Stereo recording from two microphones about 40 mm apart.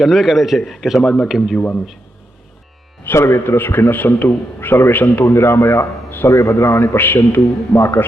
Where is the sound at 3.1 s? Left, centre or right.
Left.